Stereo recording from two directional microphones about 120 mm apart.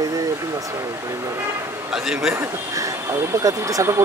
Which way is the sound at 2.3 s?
25° right (ahead or behind).